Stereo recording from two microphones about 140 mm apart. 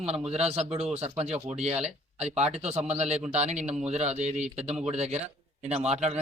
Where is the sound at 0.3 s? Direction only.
45° right (ahead or behind).